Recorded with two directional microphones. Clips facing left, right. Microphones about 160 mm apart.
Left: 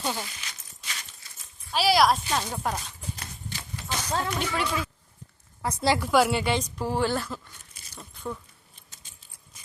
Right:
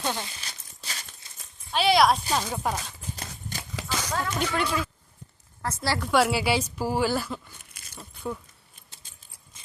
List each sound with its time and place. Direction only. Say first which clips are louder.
0.0 s speech: right 1 dB; centre (ahead or behind)
0.3 s a sound: even; 30° right (ahead or behind)
1.7 s speech: right 1 dB; centre (ahead or behind)
3.7 s a sound: right 3 dB; 90° right
4.1 s speech: left 2 dB; 25° left (ahead or behind)
4.4 s speech: right 2 dB; centre (ahead or behind)
5.6 s a woman's voice: left 4 dB; 15° left (ahead or behind)
6.0 s speech: right 3 dB; centre (ahead or behind)